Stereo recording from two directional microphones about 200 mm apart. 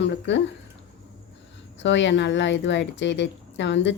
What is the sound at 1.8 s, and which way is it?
Speech, 65° left (ahead or behind).